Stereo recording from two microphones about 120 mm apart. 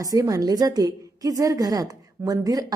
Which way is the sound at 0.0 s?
30° right (ahead or behind).